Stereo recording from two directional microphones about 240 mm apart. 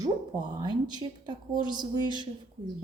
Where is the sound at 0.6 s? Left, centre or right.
Centre.